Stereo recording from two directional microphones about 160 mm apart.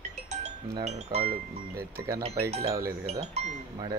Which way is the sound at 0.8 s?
45° right (ahead or behind).